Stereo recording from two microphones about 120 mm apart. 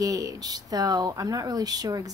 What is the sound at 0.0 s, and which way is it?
A woman's voice, 30° right (ahead or behind).